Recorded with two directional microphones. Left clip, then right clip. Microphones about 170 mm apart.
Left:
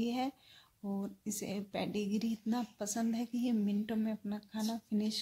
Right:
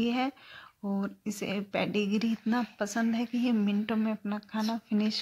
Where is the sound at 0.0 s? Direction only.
Centre (ahead or behind).